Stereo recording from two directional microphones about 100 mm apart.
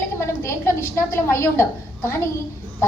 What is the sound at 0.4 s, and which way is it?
A woman's voice, 30° left (ahead or behind).